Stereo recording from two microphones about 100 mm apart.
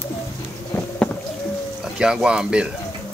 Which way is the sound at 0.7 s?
25° left (ahead or behind).